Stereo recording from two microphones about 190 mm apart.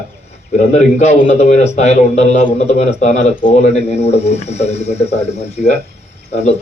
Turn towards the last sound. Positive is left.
turn(degrees=35)  # may be behind; listen again after turning